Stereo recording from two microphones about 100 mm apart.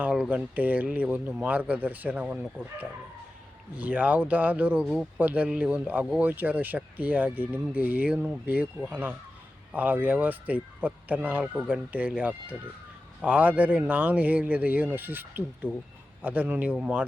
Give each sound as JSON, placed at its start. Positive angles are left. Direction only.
{"t": 0.0, "sound": "speech", "side_deg": -15}
{"t": 3.8, "sound": "speech", "side_deg": -15}
{"t": 4.9, "sound": "speech", "side_deg": -5}
{"t": 5.2, "sound": "speech", "side_deg": -15}